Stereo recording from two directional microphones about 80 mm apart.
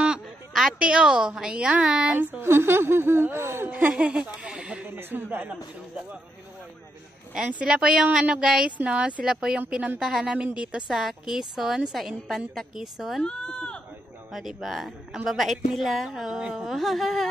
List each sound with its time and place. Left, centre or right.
0.5 s a sound: centre
0.7 s speech: centre
2.4 s a sound: right
3.9 s speech: centre
4.4 s a sound: centre
4.9 s speech: right
7.4 s speech: centre
13.2 s speech: centre
14.3 s speech: centre